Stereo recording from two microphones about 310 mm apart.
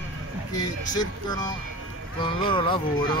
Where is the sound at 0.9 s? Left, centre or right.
Centre.